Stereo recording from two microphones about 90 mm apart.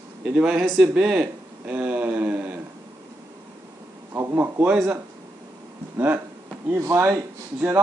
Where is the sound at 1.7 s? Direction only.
15° right (ahead or behind).